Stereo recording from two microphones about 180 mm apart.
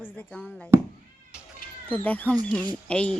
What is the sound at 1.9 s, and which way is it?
Speech, 10° left (ahead or behind).